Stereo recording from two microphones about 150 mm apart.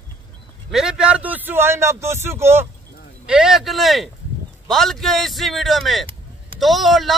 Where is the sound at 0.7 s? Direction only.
5° right (ahead or behind).